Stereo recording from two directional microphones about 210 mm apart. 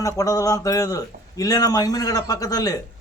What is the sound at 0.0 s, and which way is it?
A man's voice, 15° left (ahead or behind).